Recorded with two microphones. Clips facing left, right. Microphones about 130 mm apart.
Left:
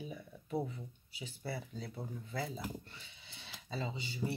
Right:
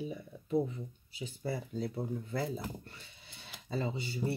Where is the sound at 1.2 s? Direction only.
45° right (ahead or behind).